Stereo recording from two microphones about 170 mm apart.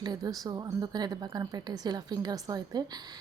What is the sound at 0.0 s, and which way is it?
Speech, 20° right (ahead or behind).